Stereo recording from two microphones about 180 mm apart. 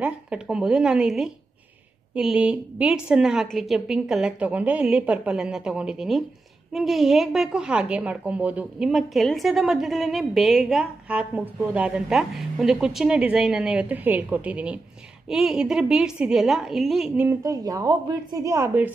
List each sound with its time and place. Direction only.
0.0 s a woman's voice: 5° right (ahead or behind)
17.3 s speech: 20° right (ahead or behind)